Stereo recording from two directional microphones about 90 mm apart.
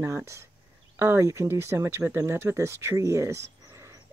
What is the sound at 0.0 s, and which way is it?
Speech, 35° right (ahead or behind).